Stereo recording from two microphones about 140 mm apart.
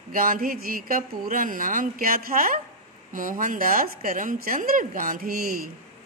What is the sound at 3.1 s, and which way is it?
Speech, 70° right (ahead or behind).